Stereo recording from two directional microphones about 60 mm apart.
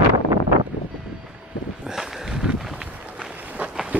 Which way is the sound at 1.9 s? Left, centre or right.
Centre.